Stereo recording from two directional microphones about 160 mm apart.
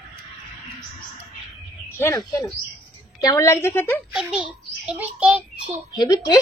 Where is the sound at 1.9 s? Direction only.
20° left (ahead or behind).